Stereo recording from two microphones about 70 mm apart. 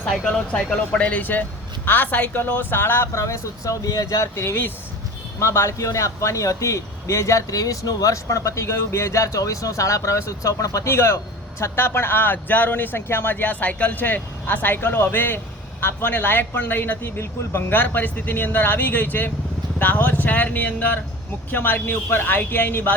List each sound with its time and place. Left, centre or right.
0.0 s speech: centre
0.9 s a man's voice: left